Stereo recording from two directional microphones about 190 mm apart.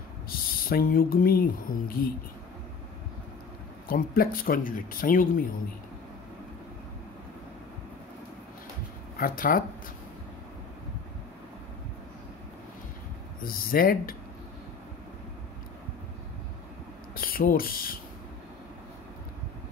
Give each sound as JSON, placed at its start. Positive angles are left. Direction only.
{"t": 0.7, "sound": "speech", "side_deg": 50}
{"t": 3.9, "sound": "speech", "side_deg": 50}
{"t": 9.2, "sound": "speech", "side_deg": 50}
{"t": 13.4, "sound": "speech", "side_deg": 50}
{"t": 17.1, "sound": "speech", "side_deg": 50}